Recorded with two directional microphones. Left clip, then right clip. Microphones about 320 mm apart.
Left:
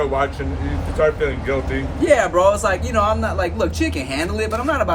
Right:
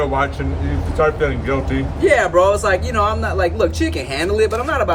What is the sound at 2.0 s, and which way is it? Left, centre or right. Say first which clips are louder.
Speech: right 1 dB; centre.